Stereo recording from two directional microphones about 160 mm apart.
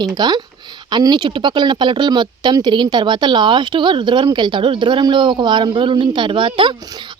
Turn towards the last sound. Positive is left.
turn(degrees=-30)  # may be behind; listen again after turning